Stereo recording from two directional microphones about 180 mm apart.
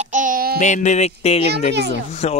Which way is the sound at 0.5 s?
40° left (ahead or behind).